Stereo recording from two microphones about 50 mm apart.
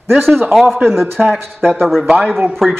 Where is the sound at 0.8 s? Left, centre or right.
Right.